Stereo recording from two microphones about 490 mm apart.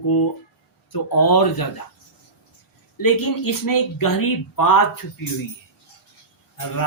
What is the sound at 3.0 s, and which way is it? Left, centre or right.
Speech, left.